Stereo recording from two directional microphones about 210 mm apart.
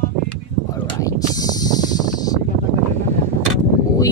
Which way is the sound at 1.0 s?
15° left (ahead or behind).